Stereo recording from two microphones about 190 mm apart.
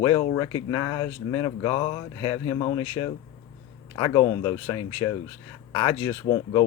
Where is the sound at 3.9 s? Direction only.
20° left (ahead or behind).